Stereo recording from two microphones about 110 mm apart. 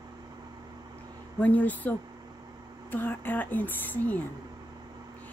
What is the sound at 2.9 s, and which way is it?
Speech, 20° left (ahead or behind).